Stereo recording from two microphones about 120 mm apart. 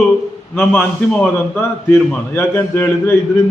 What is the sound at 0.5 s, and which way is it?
A man's voice, 10° left (ahead or behind).